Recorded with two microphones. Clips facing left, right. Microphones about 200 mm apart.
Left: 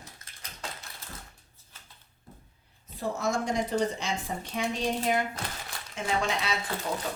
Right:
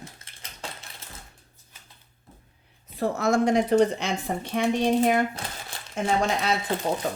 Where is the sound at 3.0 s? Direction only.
65° right (ahead or behind); by 6.5 s 50° right (ahead or behind).